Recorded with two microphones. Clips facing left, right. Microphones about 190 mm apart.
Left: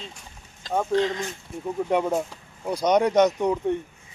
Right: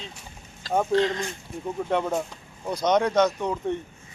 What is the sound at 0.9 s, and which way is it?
Speech, 10° left (ahead or behind).